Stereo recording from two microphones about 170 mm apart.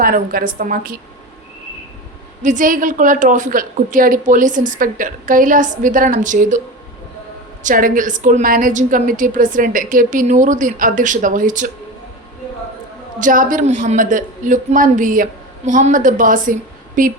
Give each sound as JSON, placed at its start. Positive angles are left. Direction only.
{"t": 0.0, "sound": "a woman's voice", "side_deg": -60}
{"t": 2.4, "sound": "a woman's voice", "side_deg": -50}
{"t": 7.6, "sound": "a woman's voice", "side_deg": -50}
{"t": 13.1, "sound": "a woman's voice", "side_deg": -50}